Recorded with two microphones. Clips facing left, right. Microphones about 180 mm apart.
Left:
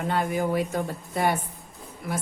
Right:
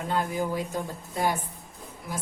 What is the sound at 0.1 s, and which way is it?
A woman's voice, 70° left (ahead or behind).